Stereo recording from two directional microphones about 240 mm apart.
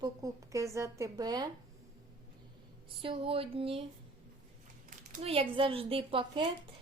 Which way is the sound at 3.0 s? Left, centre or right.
Right.